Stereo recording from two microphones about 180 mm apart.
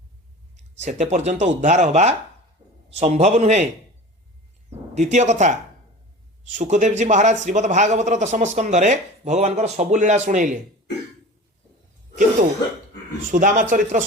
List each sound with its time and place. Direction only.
0.5 s a man's voice: 40° right (ahead or behind)
4.9 s a man's voice: 40° right (ahead or behind)
13.3 s a man's voice: 45° right (ahead or behind)